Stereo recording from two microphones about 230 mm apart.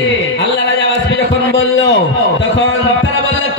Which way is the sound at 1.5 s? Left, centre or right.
Left.